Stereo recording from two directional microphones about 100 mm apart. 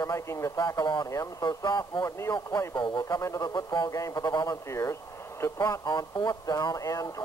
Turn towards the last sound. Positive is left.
turn(degrees=35)  # may be behind; listen again after turning